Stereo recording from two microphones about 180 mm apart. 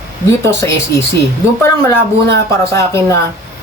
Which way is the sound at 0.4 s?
15° left (ahead or behind).